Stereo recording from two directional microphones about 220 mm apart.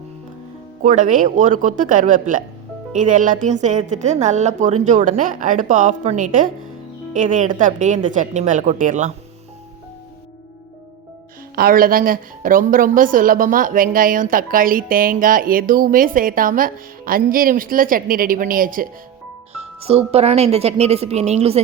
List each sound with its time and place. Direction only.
0.8 s a woman's voice: 35° right (ahead or behind)
11.5 s a woman's voice: 40° right (ahead or behind)
19.5 s speech: 25° right (ahead or behind)